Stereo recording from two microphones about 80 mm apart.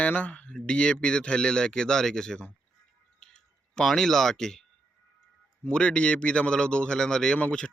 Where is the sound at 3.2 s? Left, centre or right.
Centre.